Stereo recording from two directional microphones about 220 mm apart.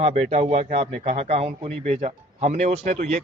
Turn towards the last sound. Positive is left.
turn(degrees=-35)  # may be behind; listen again after turning